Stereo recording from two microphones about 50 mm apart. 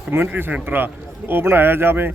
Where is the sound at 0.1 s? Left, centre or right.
Right.